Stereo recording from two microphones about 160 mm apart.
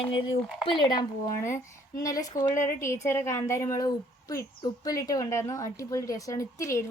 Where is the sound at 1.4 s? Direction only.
15° left (ahead or behind).